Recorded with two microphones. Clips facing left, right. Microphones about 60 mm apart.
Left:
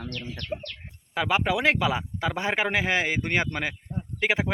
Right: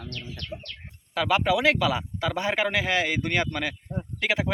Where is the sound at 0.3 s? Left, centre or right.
Left.